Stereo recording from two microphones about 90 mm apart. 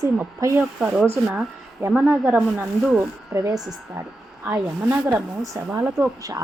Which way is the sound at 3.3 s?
40° right (ahead or behind).